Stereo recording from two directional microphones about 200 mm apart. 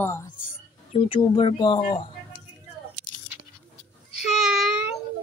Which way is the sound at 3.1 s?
75° left (ahead or behind).